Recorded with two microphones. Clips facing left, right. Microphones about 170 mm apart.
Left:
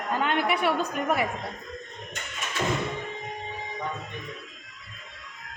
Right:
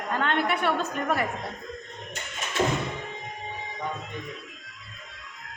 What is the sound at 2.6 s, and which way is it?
Music, 25° right (ahead or behind).